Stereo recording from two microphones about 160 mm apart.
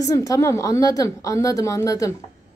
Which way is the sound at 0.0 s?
20° left (ahead or behind).